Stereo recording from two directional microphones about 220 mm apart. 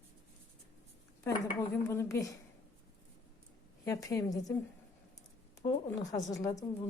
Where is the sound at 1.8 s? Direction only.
10° left (ahead or behind).